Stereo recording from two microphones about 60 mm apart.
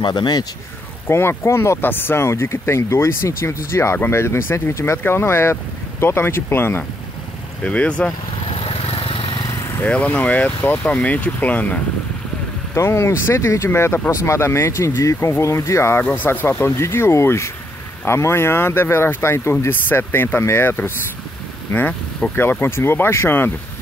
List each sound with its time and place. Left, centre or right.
1.0 s speech: left
1.8 s speech: left
7.6 s speech: left
9.8 s speech: left
12.7 s speech: left
13.7 s speech: left
16.0 s speech: left
16.3 s speech: left
19.7 s speech: left